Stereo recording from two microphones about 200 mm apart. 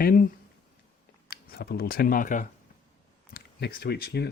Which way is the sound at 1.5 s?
50° left (ahead or behind).